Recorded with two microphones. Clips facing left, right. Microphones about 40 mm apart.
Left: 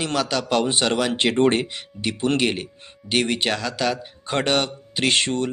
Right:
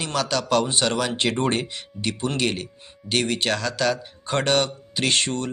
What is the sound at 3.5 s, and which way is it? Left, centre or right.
Speech, centre.